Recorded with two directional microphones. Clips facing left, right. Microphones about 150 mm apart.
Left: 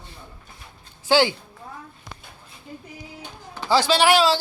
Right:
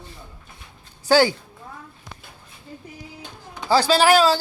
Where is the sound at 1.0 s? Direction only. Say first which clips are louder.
Right 2 dB; 40° right (ahead or behind).